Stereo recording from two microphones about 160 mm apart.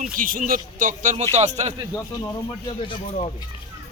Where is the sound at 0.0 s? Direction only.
60° right (ahead or behind).